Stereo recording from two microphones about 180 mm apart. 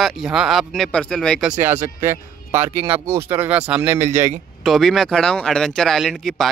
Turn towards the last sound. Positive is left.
turn(degrees=0)  # may be behind; listen again after turning